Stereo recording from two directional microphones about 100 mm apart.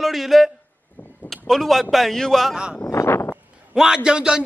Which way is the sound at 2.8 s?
25° left (ahead or behind).